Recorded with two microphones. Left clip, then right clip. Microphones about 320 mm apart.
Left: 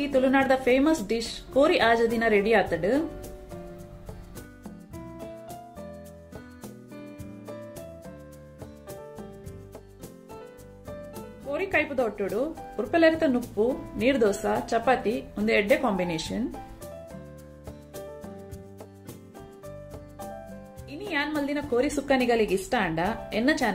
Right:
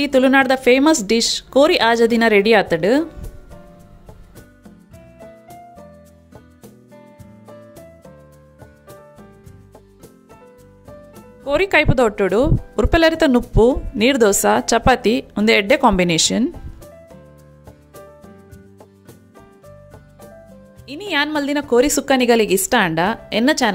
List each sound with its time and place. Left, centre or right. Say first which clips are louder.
0.0 s speech: right 9 dB; right
11.4 s speech: right 11 dB; right
20.8 s speech: right 10 dB; right